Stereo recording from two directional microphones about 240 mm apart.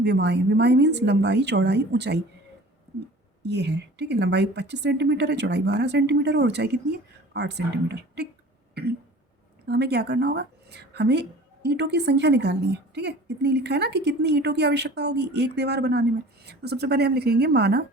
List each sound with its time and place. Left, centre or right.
0.0 s a woman's voice: right
3.4 s a woman's voice: right
8.7 s a sound: right
9.6 s a woman's voice: right